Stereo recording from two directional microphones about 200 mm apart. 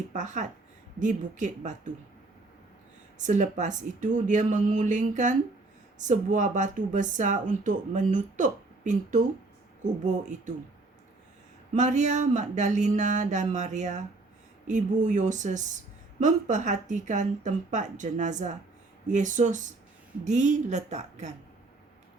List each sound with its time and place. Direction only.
0.1 s speech: 40° right (ahead or behind)
3.2 s speech: 40° right (ahead or behind)
11.7 s speech: 35° right (ahead or behind)